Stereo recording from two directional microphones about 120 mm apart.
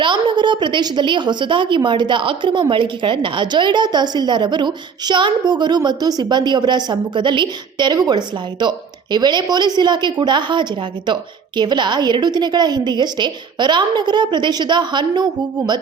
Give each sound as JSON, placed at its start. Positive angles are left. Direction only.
{"t": 0.0, "sound": "a woman's voice", "side_deg": -40}